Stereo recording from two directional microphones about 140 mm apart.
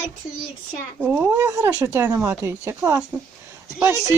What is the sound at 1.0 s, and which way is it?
Speech, 15° right (ahead or behind).